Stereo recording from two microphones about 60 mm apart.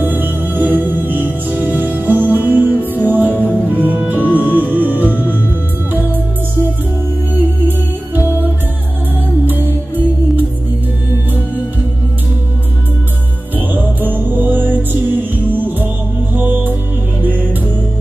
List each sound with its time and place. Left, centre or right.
0.0 s music: right
7.6 s music: right
13.6 s music: right